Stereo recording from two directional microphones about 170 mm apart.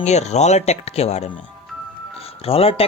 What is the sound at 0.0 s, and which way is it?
Speech, 40° left (ahead or behind).